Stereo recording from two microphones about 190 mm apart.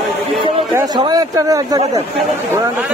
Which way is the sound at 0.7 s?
20° right (ahead or behind).